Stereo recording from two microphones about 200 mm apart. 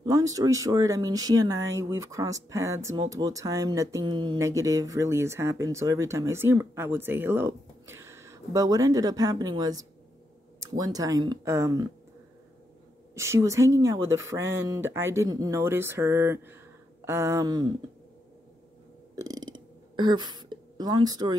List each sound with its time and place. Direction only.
0.0 s speech: 15° right (ahead or behind)
13.1 s speech: 15° right (ahead or behind)
19.1 s burping: 15° right (ahead or behind)